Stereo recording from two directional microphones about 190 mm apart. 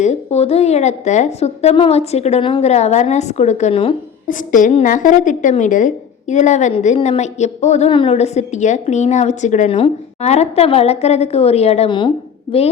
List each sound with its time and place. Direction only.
0.0 s a woman's voice: 35° left (ahead or behind)
4.3 s a woman's voice: 45° left (ahead or behind); by 12.6 s 25° left (ahead or behind)